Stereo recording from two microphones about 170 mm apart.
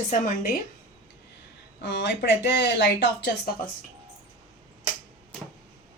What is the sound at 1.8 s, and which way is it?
Speech, 90° left.